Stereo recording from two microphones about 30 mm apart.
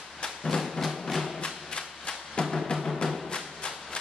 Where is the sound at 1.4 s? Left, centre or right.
Left.